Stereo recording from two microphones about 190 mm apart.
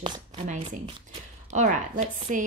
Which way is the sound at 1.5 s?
40° right (ahead or behind).